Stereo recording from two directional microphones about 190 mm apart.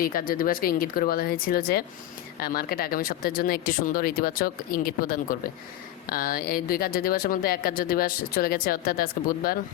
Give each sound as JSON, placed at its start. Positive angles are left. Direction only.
{"t": 0.0, "sound": "speech", "side_deg": 50}